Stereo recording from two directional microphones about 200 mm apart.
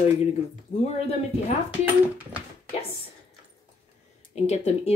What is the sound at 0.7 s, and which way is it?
Speech, 35° left (ahead or behind).